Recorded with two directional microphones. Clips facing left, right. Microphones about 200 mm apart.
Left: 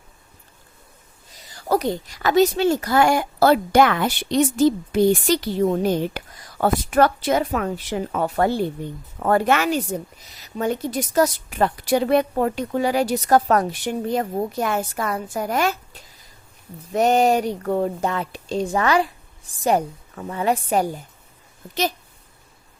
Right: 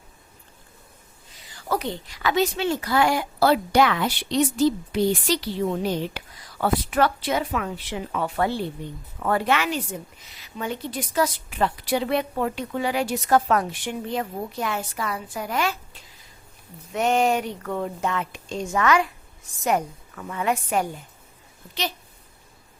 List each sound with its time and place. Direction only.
1.5 s a woman's voice: 40° left (ahead or behind)